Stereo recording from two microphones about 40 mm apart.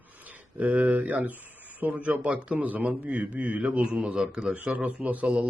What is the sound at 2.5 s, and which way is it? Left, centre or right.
Speech, right.